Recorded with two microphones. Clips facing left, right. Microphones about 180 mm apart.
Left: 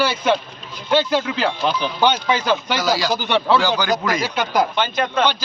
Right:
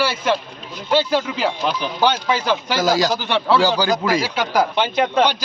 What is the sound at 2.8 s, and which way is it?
Speech, 45° right (ahead or behind).